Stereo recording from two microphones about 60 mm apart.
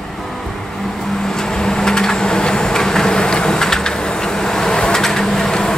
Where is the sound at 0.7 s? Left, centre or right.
Centre.